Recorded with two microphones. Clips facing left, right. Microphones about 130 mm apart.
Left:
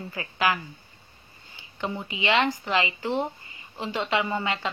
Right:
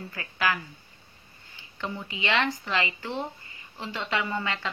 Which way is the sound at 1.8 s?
15° left (ahead or behind).